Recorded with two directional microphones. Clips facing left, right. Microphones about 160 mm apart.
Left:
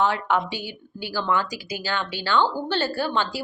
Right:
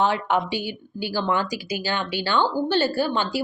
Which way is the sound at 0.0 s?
20° right (ahead or behind).